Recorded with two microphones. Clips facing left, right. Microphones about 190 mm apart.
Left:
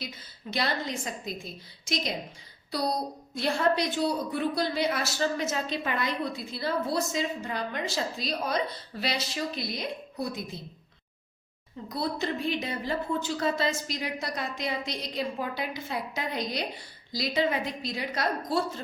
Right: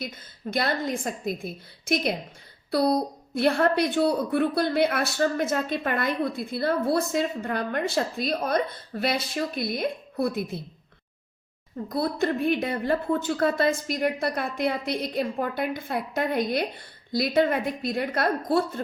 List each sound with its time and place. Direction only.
0.5 s a woman's voice: 50° right (ahead or behind)
3.3 s a woman's voice: 60° right (ahead or behind)
11.9 s a woman's voice: 50° right (ahead or behind)